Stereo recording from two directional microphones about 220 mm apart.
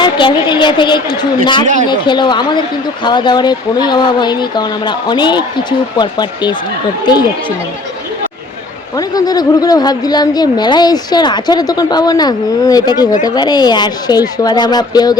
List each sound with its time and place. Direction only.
0.0 s speech: 20° left (ahead or behind)
1.6 s a man's voice: 35° right (ahead or behind)
1.9 s speech: 20° left (ahead or behind)
9.0 s a woman's voice: 15° left (ahead or behind)